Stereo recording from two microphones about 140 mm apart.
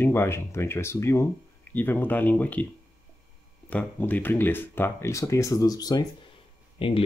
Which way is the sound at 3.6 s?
10° left (ahead or behind).